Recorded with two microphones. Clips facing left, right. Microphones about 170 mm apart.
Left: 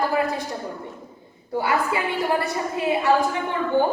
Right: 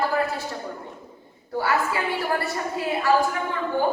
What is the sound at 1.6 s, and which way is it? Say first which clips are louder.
A woman's voice: left 1 dB; 15° left (ahead or behind).